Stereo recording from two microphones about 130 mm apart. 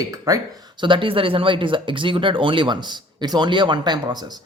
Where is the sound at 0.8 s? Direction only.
40° right (ahead or behind).